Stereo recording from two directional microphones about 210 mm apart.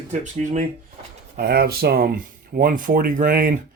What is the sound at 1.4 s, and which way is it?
Speech, 50° right (ahead or behind).